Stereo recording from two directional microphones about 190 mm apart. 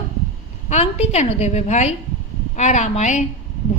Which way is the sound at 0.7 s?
35° left (ahead or behind).